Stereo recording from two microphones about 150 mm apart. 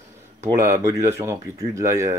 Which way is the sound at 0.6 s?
20° right (ahead or behind).